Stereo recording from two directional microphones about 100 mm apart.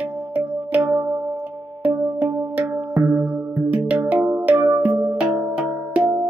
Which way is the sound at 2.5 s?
15° right (ahead or behind).